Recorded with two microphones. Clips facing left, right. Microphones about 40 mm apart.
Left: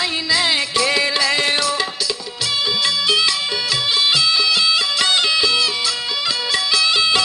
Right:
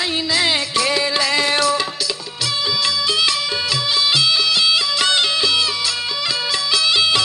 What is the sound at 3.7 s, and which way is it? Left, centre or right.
Music, left.